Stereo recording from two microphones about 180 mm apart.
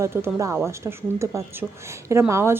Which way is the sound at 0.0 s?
15° right (ahead or behind).